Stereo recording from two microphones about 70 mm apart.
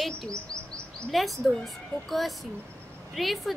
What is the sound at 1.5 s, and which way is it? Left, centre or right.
A woman's voice, centre.